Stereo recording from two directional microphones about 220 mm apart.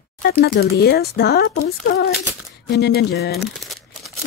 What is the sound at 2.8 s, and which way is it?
Speech, 45° left (ahead or behind).